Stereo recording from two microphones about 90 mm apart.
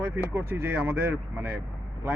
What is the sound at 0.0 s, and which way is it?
Speech, 25° right (ahead or behind).